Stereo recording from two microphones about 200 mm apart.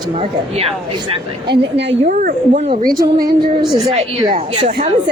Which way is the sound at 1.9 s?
40° right (ahead or behind).